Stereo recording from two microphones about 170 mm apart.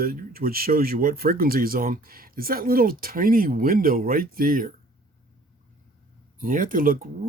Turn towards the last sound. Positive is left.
turn(degrees=-55)  # may be behind; listen again after turning